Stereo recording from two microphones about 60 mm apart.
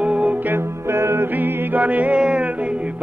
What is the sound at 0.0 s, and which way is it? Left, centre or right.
Music, right.